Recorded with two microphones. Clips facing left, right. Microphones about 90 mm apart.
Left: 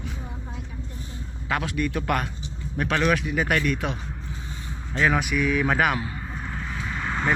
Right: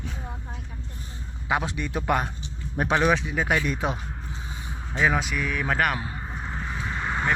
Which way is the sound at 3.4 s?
10° right (ahead or behind).